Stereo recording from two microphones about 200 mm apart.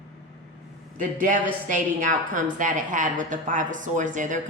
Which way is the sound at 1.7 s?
40° right (ahead or behind).